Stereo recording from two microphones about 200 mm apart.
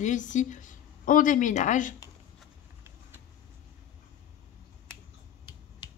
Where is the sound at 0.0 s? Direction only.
40° left (ahead or behind).